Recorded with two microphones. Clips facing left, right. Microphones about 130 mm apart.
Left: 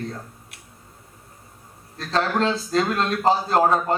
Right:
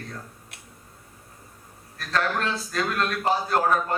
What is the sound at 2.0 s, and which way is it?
A man's voice, 25° left (ahead or behind).